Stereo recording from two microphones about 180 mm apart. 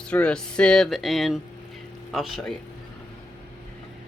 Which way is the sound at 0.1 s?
5° left (ahead or behind).